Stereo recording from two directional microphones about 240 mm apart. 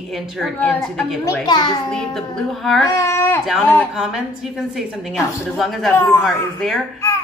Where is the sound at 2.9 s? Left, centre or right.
Centre.